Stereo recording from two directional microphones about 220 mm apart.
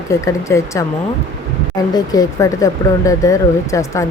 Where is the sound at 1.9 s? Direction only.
15° left (ahead or behind).